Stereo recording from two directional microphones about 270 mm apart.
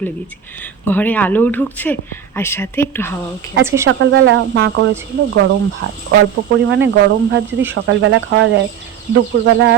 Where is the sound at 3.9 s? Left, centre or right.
Right.